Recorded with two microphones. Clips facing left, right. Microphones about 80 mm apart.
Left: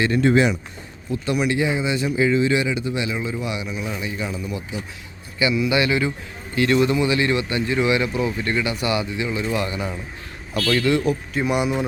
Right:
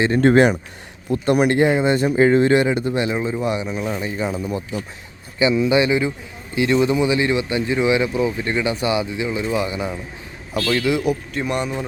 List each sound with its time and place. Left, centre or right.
0.2 s speech: right
3.2 s speech: right
3.4 s speech: right
5.4 s a man's voice: right; by 11.2 s centre
11.3 s speech: centre